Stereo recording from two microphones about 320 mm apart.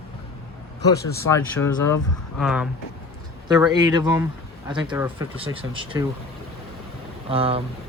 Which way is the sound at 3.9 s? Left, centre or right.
Centre.